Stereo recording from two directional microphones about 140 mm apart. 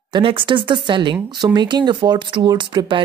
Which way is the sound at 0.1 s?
35° right (ahead or behind).